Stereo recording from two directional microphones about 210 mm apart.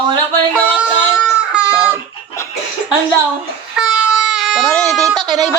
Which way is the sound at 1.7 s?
10° left (ahead or behind).